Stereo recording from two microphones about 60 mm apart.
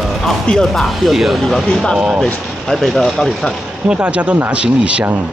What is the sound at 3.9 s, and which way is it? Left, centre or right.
Speech, right.